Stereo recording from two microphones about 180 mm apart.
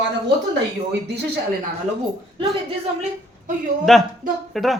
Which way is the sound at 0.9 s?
65° right (ahead or behind).